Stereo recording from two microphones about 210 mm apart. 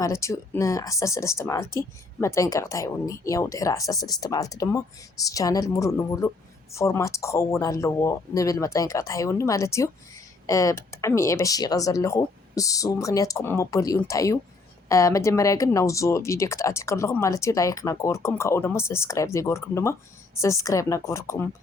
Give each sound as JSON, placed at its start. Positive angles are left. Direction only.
{"t": 0.0, "sound": "speech", "side_deg": 15}